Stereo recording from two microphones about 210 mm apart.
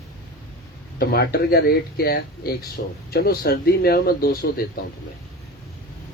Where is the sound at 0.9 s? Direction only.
50° left (ahead or behind).